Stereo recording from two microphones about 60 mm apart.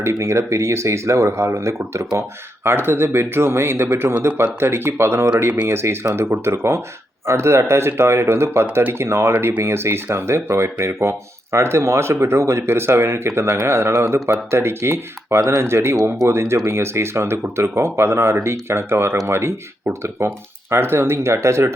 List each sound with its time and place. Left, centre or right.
0.0 s speech: right
2.6 s speech: right